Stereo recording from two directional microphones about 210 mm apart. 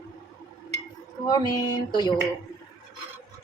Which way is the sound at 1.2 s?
15° left (ahead or behind).